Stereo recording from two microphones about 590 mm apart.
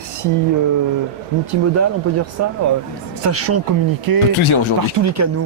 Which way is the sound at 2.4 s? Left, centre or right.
Right.